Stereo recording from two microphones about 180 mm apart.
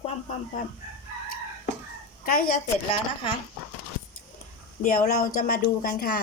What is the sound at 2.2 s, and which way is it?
Speech, 50° left (ahead or behind).